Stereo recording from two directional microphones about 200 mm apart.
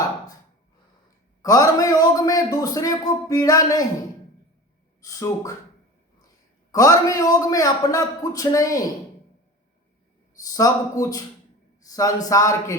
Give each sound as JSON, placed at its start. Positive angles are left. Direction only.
{"t": 1.4, "sound": "a man's voice", "side_deg": 15}
{"t": 5.0, "sound": "a man's voice", "side_deg": 15}
{"t": 6.7, "sound": "a man's voice", "side_deg": 15}
{"t": 10.4, "sound": "a man's voice", "side_deg": 15}